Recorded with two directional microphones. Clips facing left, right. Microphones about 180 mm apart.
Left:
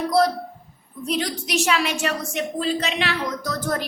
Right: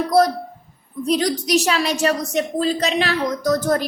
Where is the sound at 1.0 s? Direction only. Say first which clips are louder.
Right 6 dB; 40° right (ahead or behind).